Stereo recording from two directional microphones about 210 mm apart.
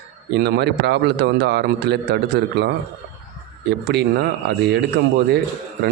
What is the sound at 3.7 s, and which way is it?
Speech, 50° right (ahead or behind).